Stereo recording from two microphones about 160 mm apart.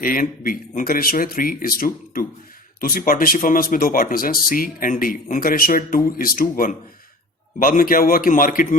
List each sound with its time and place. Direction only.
0.0 s speech: 60° left (ahead or behind)